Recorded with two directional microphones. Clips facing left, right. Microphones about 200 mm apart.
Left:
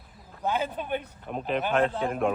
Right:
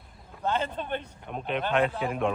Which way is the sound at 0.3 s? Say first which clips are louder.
Even; 5° left (ahead or behind).